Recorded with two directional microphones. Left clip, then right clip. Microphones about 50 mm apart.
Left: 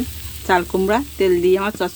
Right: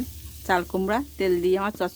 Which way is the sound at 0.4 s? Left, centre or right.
Centre.